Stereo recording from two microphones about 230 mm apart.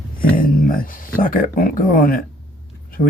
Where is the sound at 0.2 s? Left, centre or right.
Left.